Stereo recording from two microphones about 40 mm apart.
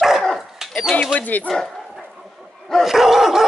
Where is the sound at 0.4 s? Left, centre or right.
Centre.